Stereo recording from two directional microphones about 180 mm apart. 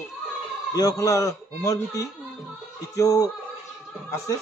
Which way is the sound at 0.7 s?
20° left (ahead or behind).